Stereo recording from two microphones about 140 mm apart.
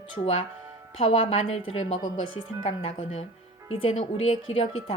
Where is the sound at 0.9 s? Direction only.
45° left (ahead or behind).